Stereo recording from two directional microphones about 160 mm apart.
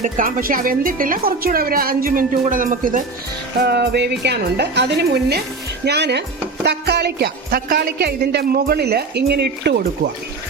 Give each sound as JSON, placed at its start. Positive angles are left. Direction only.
{"t": 0.0, "sound": "a woman's voice", "side_deg": -55}
{"t": 3.6, "sound": "a woman's voice", "side_deg": -90}